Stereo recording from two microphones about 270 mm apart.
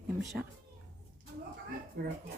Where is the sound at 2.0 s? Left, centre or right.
Right.